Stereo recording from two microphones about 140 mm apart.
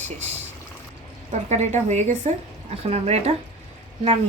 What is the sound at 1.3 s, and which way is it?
A woman's voice, 60° right (ahead or behind).